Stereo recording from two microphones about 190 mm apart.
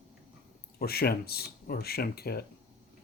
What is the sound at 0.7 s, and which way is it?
Speech, 55° left (ahead or behind).